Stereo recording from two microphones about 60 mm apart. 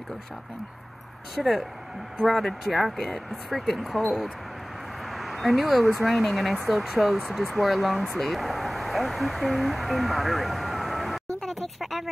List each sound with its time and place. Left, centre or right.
1.3 s speech: centre
5.1 s a sound: centre
6.0 s speech: centre